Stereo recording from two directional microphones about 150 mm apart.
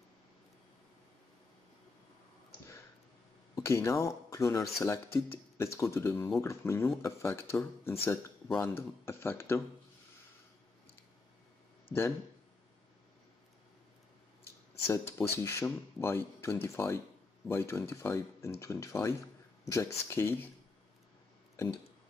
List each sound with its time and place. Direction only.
3.5 s speech: 20° left (ahead or behind)
14.9 s speech: 20° left (ahead or behind)